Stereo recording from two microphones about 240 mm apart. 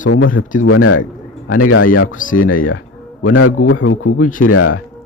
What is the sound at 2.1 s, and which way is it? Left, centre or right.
Speech, left.